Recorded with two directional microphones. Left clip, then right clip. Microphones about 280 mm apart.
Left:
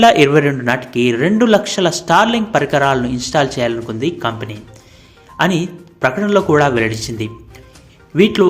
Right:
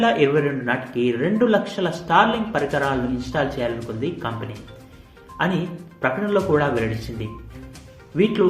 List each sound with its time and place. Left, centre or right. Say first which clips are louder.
0.0 s a man's voice: left 9 dB; left